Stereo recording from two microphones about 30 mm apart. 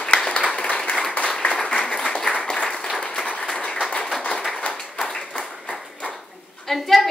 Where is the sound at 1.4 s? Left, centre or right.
Left.